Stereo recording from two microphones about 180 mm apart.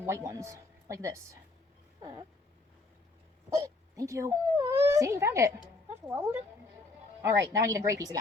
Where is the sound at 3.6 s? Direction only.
20° right (ahead or behind).